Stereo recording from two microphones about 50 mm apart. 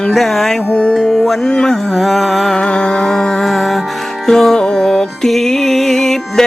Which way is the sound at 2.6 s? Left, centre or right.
Left.